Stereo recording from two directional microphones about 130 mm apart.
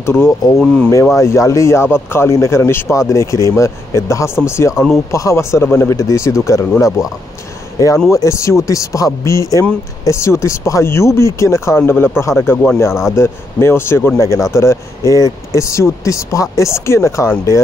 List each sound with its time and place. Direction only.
0.0 s speech: 20° left (ahead or behind)
8.1 s speech: 25° left (ahead or behind)